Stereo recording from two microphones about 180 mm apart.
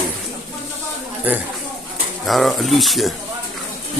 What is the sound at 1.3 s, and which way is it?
A man's voice, 10° right (ahead or behind).